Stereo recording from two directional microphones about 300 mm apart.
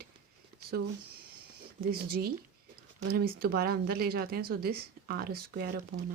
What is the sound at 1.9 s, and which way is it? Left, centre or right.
Speech, right.